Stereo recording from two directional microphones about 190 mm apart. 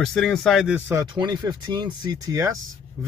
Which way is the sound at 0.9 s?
20° right (ahead or behind).